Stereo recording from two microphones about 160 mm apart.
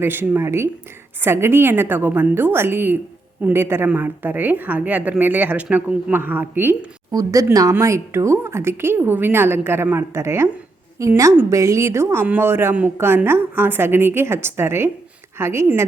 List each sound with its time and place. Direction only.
0.0 s speech: 15° right (ahead or behind)